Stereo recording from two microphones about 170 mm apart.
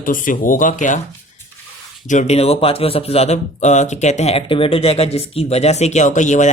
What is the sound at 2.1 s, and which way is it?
Speech, 40° left (ahead or behind).